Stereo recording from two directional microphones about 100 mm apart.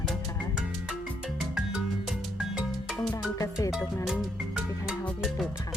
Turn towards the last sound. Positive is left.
turn(degrees=-5)  # may be behind; listen again after turning